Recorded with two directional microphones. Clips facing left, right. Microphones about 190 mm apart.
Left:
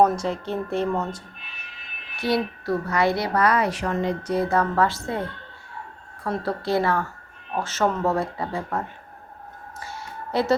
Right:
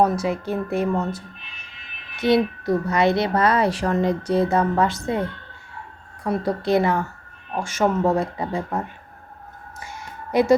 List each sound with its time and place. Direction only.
0.0 s speech: 10° right (ahead or behind)
2.1 s a woman's voice: 20° right (ahead or behind)
4.4 s a woman's voice: 20° right (ahead or behind)
6.2 s speech: 20° right (ahead or behind)
10.3 s speech: 15° right (ahead or behind)